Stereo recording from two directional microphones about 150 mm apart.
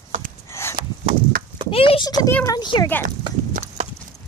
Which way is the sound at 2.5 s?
30° left (ahead or behind).